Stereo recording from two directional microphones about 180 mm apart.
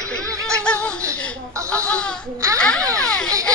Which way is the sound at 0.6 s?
5° left (ahead or behind).